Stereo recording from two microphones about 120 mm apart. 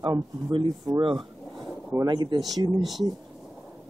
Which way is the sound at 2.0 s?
40° right (ahead or behind).